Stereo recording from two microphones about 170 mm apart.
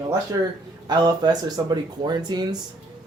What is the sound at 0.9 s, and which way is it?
Speech, 25° right (ahead or behind).